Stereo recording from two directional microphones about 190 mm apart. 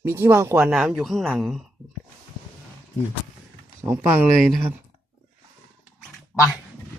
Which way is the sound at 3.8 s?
10° right (ahead or behind).